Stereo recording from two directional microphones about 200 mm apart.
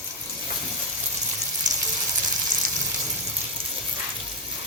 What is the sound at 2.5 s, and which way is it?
Frying, 40° right (ahead or behind).